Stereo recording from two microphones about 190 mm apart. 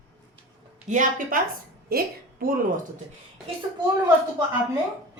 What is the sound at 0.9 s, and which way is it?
A woman's voice, 40° right (ahead or behind).